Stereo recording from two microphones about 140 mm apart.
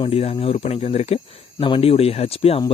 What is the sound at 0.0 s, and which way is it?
Speech, 45° left (ahead or behind).